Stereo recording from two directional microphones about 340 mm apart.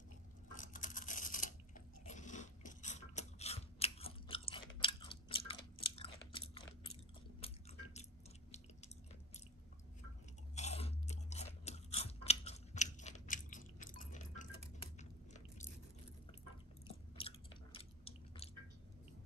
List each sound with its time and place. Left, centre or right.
0.6 s a sound: left
2.0 s ratchet: left
7.3 s chewing: centre
10.5 s chewing: centre
16.8 s chewing: centre